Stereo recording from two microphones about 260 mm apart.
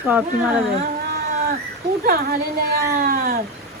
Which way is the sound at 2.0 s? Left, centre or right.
Right.